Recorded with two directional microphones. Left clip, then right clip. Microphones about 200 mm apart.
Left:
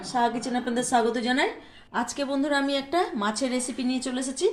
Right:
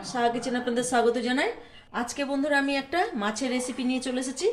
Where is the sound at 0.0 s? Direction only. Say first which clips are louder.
Left 1 dB; 5° left (ahead or behind).